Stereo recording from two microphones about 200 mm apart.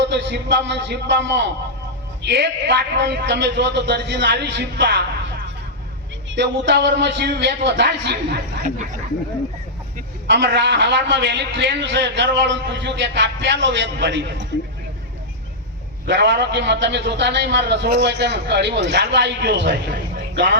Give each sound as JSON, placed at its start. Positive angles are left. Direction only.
{"t": 0.0, "sound": "a man's voice", "side_deg": -60}
{"t": 6.3, "sound": "a man's voice", "side_deg": -60}
{"t": 10.2, "sound": "a man's voice", "side_deg": -60}
{"t": 16.0, "sound": "a man's voice", "side_deg": -60}